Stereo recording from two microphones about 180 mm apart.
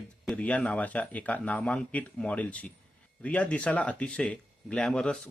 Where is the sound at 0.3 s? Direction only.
5° left (ahead or behind).